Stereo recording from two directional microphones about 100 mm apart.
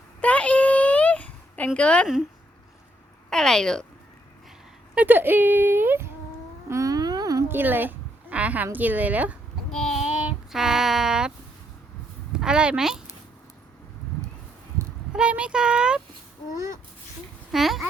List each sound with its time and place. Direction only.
0.2 s a sound: 15° left (ahead or behind)
3.2 s a woman's voice: 5° left (ahead or behind)
4.9 s speech: 20° right (ahead or behind)
6.7 s a sound: 35° right (ahead or behind)
7.4 s a woman's voice: 20° right (ahead or behind)
10.2 s child singing: 10° right (ahead or behind)
12.3 s speech: 10° right (ahead or behind)
15.1 s speech: 10° right (ahead or behind)
17.5 s a child's voice: centre (ahead or behind)